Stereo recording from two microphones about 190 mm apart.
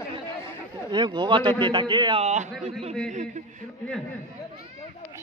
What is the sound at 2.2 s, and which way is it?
Speech, 40° right (ahead or behind).